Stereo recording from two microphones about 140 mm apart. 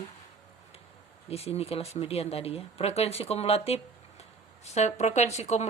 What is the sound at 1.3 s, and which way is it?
Speech, 45° left (ahead or behind).